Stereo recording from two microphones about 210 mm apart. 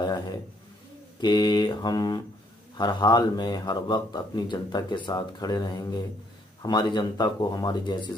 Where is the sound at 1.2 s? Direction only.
20° left (ahead or behind).